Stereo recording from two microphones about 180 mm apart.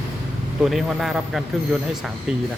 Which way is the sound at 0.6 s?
Centre (ahead or behind).